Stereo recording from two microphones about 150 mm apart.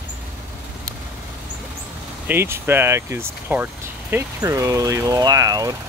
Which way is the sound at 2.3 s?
15° right (ahead or behind).